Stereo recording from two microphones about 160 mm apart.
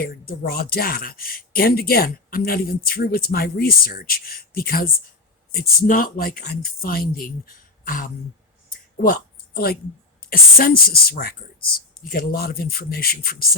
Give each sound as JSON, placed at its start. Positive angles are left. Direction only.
{"t": 0.0, "sound": "speech", "side_deg": 70}
{"t": 8.7, "sound": "a sound", "side_deg": 60}
{"t": 10.2, "sound": "speech", "side_deg": 70}